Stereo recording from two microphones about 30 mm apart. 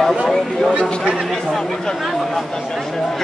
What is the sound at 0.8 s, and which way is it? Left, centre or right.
Speech, left.